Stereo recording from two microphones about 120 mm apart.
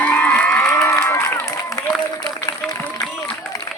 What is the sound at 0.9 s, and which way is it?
Crowd, 20° left (ahead or behind).